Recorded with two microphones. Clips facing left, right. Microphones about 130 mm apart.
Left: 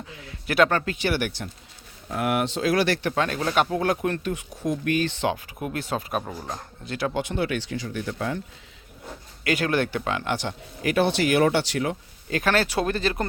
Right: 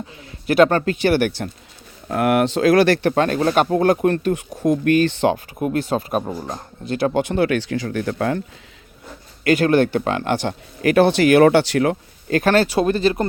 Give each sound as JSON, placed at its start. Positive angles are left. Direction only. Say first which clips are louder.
{"t": 0.1, "sound": "a man's voice", "louder": "right 8 dB", "side_deg": -35}
{"t": 1.1, "sound": "speech", "louder": "right 8 dB", "side_deg": -80}
{"t": 2.0, "sound": "speech", "louder": "right 7 dB", "side_deg": -65}
{"t": 3.1, "sound": "speech", "louder": "right 7 dB", "side_deg": -45}
{"t": 5.3, "sound": "speech", "louder": "right 8 dB", "side_deg": -35}
{"t": 6.9, "sound": "speech", "louder": "right 8 dB", "side_deg": -50}
{"t": 7.3, "sound": "speech", "louder": "right 8 dB", "side_deg": -80}
{"t": 8.0, "sound": "speech", "louder": "right 7 dB", "side_deg": -65}
{"t": 9.4, "sound": "speech", "louder": "right 8 dB", "side_deg": -35}
{"t": 10.4, "sound": "speech", "louder": "right 8 dB", "side_deg": -70}
{"t": 12.3, "sound": "speech", "louder": "right 7 dB", "side_deg": -45}
{"t": 12.8, "sound": "speech", "louder": "right 7 dB", "side_deg": -30}